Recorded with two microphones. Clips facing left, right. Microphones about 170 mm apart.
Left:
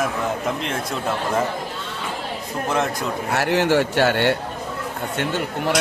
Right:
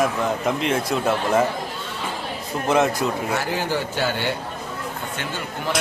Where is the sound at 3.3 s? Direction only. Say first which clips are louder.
Left 5 dB; 70° left (ahead or behind).